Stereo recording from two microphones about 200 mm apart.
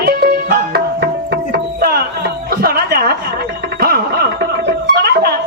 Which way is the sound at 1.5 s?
50° right (ahead or behind).